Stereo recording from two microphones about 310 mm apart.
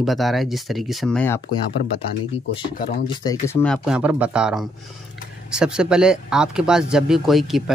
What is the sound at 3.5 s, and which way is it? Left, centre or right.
Speech, centre.